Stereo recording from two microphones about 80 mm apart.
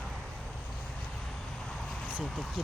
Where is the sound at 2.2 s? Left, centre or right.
Centre.